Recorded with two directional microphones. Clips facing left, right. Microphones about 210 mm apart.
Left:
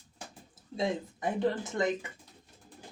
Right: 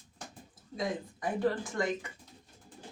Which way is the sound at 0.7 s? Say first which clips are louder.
Left 3 dB; 25° left (ahead or behind).